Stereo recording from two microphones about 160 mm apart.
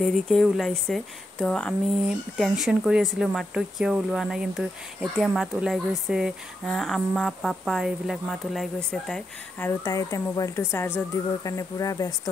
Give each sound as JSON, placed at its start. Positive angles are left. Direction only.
{"t": 0.0, "sound": "speech", "side_deg": 0}
{"t": 9.6, "sound": "a woman's voice", "side_deg": 20}